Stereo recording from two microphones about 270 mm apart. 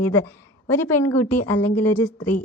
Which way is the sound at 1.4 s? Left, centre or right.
Left.